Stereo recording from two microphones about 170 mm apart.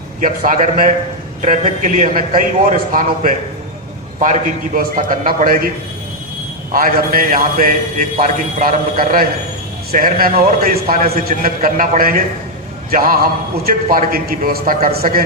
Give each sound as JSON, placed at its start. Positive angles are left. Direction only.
{"t": 0.2, "sound": "a man's voice", "side_deg": -50}
{"t": 6.7, "sound": "a man's voice", "side_deg": -60}